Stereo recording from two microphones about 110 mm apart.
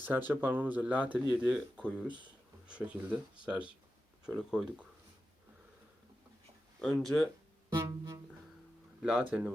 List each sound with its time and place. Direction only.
0.0 s speech: 15° right (ahead or behind)
6.8 s speech: centre (ahead or behind)
7.9 s music: 30° right (ahead or behind)
9.0 s speech: 10° right (ahead or behind)